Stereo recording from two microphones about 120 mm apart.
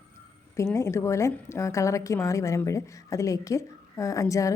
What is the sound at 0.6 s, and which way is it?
A woman's voice, 25° left (ahead or behind).